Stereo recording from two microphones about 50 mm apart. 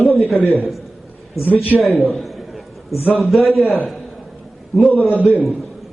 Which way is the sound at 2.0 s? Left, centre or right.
Centre.